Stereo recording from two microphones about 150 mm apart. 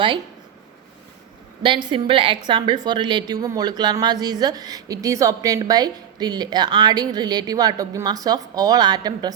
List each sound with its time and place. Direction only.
1.6 s a woman's voice: 35° right (ahead or behind)